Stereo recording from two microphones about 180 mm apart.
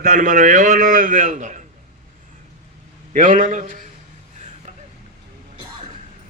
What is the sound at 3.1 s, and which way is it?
Speech, 45° right (ahead or behind).